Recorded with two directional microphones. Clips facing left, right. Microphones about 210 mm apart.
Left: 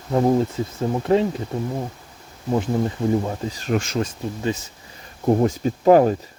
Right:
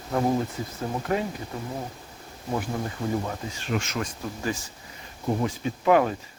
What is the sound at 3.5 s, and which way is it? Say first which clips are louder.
Speech: left 6 dB; 40° left (ahead or behind).